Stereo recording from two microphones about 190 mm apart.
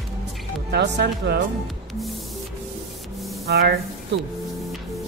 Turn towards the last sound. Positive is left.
turn(degrees=-60)  # may be behind; listen again after turning